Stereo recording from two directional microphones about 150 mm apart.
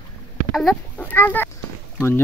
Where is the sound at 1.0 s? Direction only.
15° left (ahead or behind).